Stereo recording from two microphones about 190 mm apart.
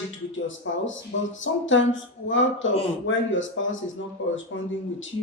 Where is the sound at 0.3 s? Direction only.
85° left.